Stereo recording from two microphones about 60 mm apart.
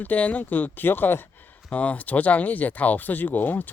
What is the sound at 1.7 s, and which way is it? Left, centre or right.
Speech, left.